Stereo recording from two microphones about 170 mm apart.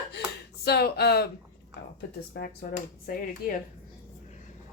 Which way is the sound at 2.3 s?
70° left (ahead or behind).